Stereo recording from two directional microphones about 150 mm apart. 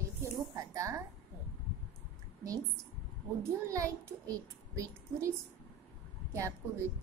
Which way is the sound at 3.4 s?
20° right (ahead or behind).